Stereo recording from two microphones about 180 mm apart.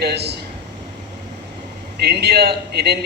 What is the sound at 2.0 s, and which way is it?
A woman's voice, 65° right (ahead or behind).